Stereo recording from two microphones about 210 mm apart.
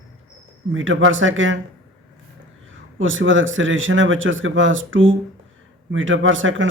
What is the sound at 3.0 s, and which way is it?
Speech, 65° right (ahead or behind).